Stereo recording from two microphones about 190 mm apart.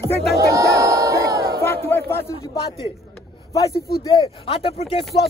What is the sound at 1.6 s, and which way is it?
Battle cry, 10° left (ahead or behind).